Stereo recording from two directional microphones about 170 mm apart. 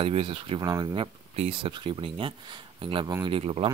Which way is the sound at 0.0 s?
30° right (ahead or behind).